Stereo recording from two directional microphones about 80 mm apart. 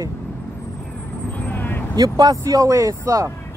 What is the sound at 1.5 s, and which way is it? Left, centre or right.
Vehicle, left.